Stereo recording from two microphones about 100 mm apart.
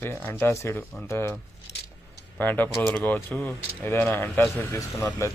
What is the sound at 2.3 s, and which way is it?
Speech, 20° left (ahead or behind).